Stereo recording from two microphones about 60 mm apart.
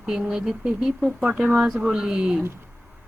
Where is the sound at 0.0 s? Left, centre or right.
Centre.